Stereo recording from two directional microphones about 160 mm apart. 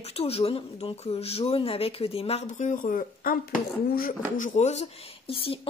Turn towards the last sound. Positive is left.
turn(degrees=35)  # may be behind; listen again after turning